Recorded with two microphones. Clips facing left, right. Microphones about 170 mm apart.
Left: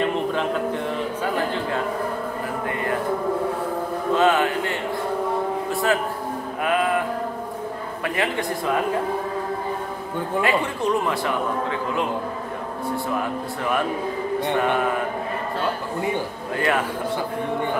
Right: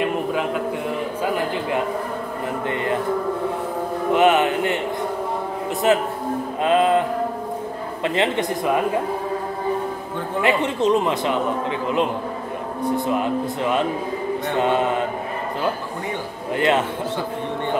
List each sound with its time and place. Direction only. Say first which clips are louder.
0.0 s a sound: right 1 dB; 10° right (ahead or behind)
1.5 s a man's voice: right 2 dB; 15° right (ahead or behind)
4.1 s music: right 3 dB; 20° right (ahead or behind)
5.9 s a man's voice: right 5 dB; 20° right (ahead or behind)
6.6 s music: right 5 dB; 25° right (ahead or behind)
8.0 s a man's voice: right 4 dB; 25° right (ahead or behind)
10.4 s a man's voice: right 5 dB; 20° right (ahead or behind)
16.5 s a man's voice: right 3 dB; 20° right (ahead or behind)